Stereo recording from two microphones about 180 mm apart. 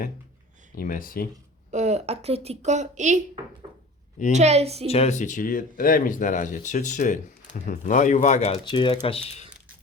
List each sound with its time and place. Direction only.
0.8 s speech: 50° left (ahead or behind)
1.7 s a woman's voice: 40° right (ahead or behind)
4.3 s a woman's voice: 40° right (ahead or behind)
4.9 s speech: 35° left (ahead or behind)